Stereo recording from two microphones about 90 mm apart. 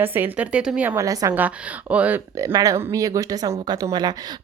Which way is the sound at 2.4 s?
40° right (ahead or behind).